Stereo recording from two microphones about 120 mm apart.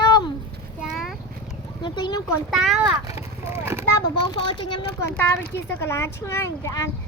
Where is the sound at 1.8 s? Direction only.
40° left (ahead or behind).